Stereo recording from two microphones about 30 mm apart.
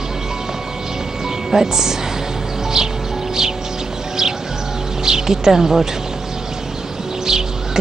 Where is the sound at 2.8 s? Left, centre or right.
Right.